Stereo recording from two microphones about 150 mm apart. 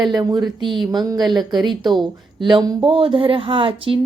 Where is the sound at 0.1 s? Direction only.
25° right (ahead or behind).